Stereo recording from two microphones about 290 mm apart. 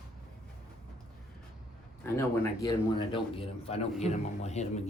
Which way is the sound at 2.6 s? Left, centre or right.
Centre.